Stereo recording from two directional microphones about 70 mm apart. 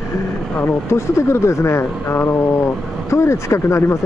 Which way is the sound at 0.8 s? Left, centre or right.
Left.